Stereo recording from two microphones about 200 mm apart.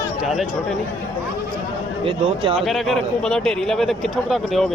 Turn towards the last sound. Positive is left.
turn(degrees=0)  # may be behind; listen again after turning